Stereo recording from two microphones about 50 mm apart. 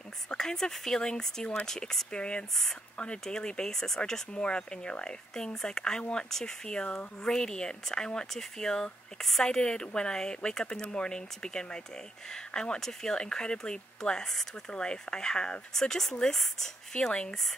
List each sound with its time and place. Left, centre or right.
0.3 s speech: centre
4.3 s speech: left
16.9 s speech: centre